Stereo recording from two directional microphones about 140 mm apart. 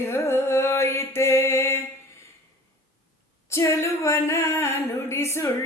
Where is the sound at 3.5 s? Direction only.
20° left (ahead or behind).